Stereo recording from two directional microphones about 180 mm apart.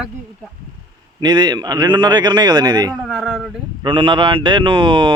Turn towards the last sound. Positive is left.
turn(degrees=-25)  # may be behind; listen again after turning